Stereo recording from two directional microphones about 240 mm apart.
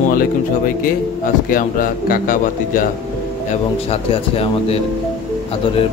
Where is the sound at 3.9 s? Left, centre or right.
Left.